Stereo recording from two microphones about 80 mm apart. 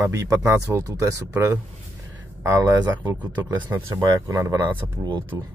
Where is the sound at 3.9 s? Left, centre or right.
Right.